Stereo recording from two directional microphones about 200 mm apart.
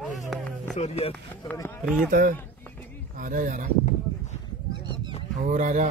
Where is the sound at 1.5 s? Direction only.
10° left (ahead or behind).